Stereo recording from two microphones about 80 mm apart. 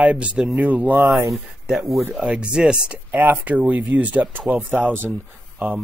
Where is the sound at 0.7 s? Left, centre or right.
Centre.